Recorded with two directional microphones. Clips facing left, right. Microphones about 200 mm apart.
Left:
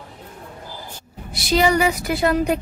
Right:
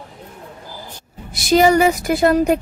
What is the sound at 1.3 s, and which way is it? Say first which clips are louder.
Speech: right 5 dB; 45° right (ahead or behind).